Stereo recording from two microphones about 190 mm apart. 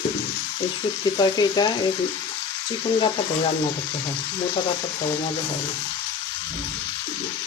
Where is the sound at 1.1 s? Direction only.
20° left (ahead or behind).